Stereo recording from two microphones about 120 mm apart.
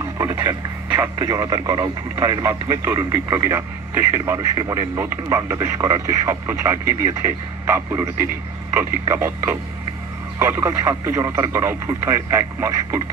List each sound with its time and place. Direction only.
0.0 s speech: 20° right (ahead or behind)